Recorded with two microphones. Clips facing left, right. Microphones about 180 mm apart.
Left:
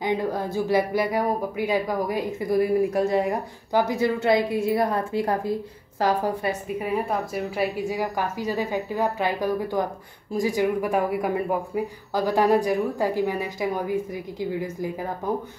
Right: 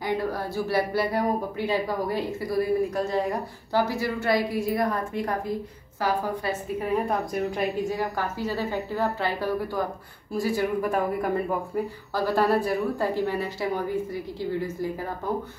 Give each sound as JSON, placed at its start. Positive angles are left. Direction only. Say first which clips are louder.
{"t": 0.0, "sound": "speech", "louder": "left 2 dB", "side_deg": 20}
{"t": 6.8, "sound": "a woman's voice", "louder": "right 1 dB", "side_deg": 5}